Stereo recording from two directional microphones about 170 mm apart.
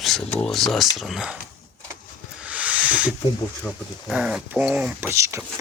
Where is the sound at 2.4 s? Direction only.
5° right (ahead or behind).